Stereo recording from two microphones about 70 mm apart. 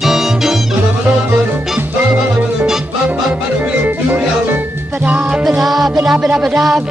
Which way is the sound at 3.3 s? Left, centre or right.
Right.